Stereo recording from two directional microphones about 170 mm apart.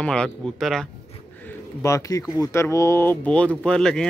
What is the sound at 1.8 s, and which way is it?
Speech, 20° left (ahead or behind).